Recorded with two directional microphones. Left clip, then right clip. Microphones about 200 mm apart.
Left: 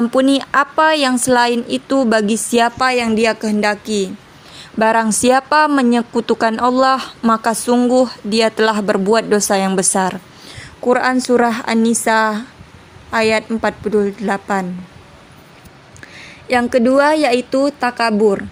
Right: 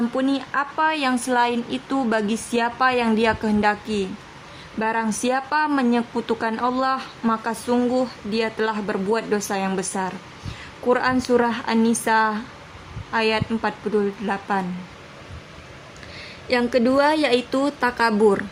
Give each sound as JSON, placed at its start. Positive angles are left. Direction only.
{"t": 0.1, "sound": "a woman's voice", "side_deg": 40}
{"t": 4.8, "sound": "a woman's voice", "side_deg": 40}
{"t": 16.1, "sound": "a woman's voice", "side_deg": 30}